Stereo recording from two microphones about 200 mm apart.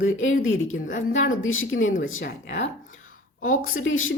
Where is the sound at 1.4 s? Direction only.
80° left.